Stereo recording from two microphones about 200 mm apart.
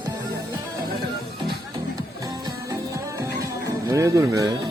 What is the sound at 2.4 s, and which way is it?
Music, 15° right (ahead or behind).